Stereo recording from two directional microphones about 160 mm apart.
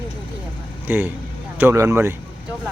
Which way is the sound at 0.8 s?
15° right (ahead or behind).